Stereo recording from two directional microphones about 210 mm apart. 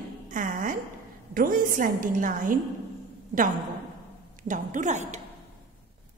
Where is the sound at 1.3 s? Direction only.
40° right (ahead or behind).